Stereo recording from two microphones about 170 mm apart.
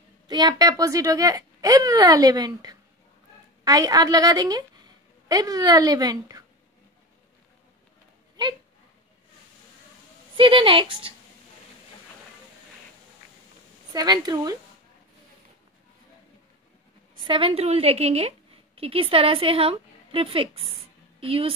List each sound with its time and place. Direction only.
0.3 s a woman's voice: 25° right (ahead or behind)
10.3 s a woman's voice: 30° right (ahead or behind)
13.9 s speech: 25° right (ahead or behind)
17.2 s a woman's voice: 30° right (ahead or behind)